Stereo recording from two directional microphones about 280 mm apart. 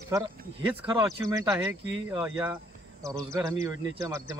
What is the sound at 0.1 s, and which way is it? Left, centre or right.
Speech, centre.